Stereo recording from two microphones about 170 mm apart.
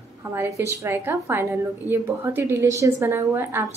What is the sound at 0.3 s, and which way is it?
A woman's voice, 15° right (ahead or behind).